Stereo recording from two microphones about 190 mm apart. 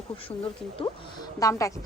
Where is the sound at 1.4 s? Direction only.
15° left (ahead or behind).